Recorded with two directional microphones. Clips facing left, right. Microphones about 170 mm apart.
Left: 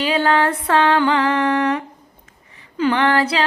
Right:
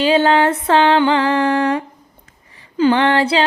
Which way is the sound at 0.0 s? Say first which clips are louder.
Right 4 dB; 25° right (ahead or behind).